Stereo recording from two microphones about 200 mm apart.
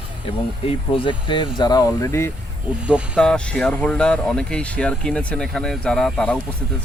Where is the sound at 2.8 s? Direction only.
5° right (ahead or behind).